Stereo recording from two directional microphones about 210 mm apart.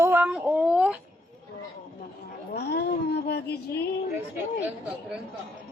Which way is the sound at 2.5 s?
50° left (ahead or behind).